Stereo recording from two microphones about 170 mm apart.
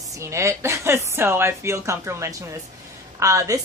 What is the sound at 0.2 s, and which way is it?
A woman's voice, 15° right (ahead or behind).